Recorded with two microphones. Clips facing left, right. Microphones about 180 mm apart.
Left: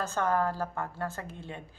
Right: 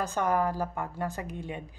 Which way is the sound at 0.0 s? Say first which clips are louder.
Right 1 dB; 15° right (ahead or behind).